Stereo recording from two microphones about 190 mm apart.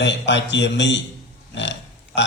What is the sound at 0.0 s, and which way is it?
Speech, 70° left (ahead or behind).